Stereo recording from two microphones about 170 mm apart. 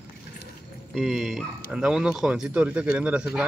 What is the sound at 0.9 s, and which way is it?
Speech, centre (ahead or behind).